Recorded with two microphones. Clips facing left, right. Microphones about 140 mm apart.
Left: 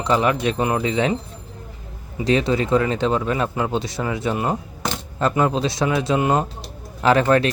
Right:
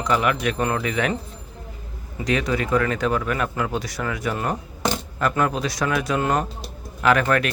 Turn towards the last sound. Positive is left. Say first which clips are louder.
# left 3 dB
turn(degrees=30)  # may be behind; listen again after turning